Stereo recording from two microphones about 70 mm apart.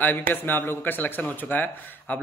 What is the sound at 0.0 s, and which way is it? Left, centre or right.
Speech, left.